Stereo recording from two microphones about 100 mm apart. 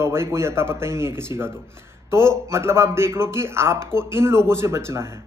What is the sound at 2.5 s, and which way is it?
A man's voice, 25° right (ahead or behind).